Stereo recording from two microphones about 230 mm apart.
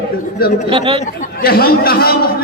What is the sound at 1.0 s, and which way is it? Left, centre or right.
A man's voice, left.